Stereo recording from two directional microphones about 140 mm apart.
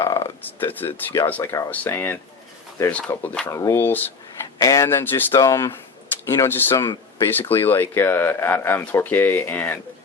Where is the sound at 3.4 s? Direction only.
20° left (ahead or behind).